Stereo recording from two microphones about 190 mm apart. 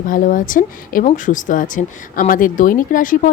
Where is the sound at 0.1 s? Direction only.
45° left (ahead or behind).